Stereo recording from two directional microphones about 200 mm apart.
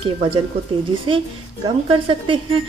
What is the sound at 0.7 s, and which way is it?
A woman's voice, 25° right (ahead or behind).